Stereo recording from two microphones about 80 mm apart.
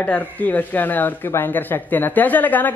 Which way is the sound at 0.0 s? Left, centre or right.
Left.